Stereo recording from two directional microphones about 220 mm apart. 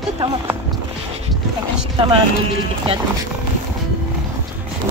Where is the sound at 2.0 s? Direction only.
25° right (ahead or behind).